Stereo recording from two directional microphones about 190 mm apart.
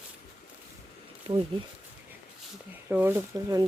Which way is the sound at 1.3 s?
25° right (ahead or behind).